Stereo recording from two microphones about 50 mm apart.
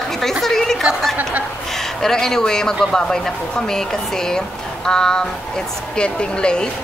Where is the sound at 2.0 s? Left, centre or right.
Centre.